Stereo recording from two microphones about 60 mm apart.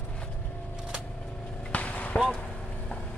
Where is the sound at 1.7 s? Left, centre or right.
Left.